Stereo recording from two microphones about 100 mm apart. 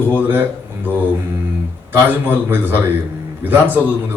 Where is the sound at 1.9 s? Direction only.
20° right (ahead or behind).